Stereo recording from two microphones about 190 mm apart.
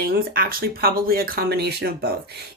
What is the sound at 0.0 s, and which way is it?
Speech, 50° right (ahead or behind).